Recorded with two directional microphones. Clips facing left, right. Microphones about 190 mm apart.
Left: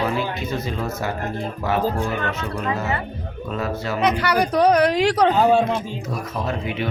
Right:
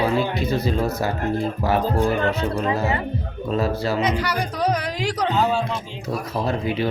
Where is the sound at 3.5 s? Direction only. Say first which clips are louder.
Right 4 dB; 35° right (ahead or behind).